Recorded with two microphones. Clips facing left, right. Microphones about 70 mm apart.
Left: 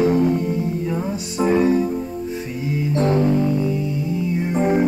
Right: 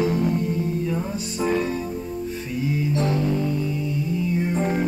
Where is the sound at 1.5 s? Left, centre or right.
Left.